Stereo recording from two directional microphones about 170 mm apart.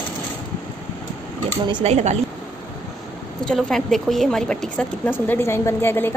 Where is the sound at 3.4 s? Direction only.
5° left (ahead or behind).